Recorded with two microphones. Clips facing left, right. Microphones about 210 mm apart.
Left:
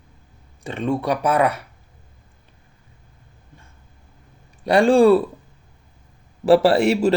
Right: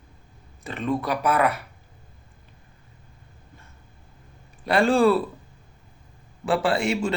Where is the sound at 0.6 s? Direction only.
30° left (ahead or behind).